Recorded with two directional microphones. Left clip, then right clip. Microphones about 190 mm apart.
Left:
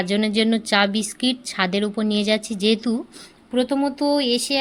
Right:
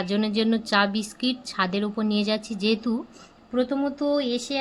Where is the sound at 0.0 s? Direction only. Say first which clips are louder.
Left 4 dB; 10° left (ahead or behind).